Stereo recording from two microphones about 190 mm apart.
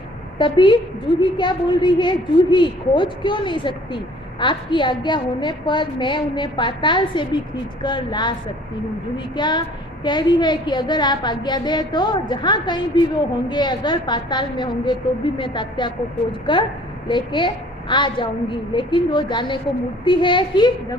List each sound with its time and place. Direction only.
0.3 s a woman's voice: 25° left (ahead or behind)